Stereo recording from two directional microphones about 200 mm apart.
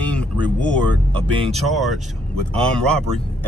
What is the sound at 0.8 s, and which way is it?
Speech, 25° right (ahead or behind).